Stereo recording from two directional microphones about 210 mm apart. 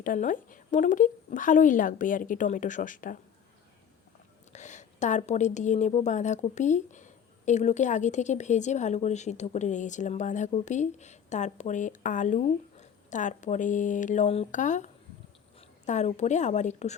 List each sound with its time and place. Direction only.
0.0 s a woman's voice: 40° left (ahead or behind)
4.5 s a woman's voice: 35° left (ahead or behind)
15.9 s a woman's voice: 35° left (ahead or behind)